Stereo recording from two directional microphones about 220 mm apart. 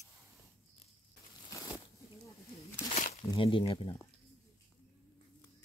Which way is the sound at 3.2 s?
20° left (ahead or behind).